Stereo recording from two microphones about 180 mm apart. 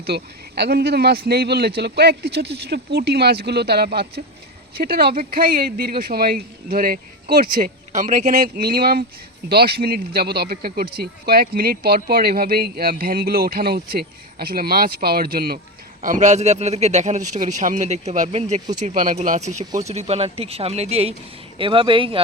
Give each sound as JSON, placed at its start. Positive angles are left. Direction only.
{"t": 0.0, "sound": "speech", "side_deg": -65}